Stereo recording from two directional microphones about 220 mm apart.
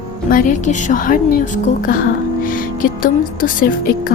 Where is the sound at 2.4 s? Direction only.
40° left (ahead or behind).